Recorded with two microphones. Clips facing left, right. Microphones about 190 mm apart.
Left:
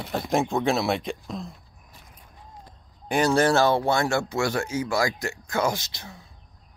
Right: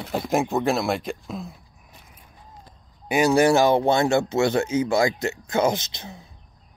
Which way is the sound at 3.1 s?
10° right (ahead or behind).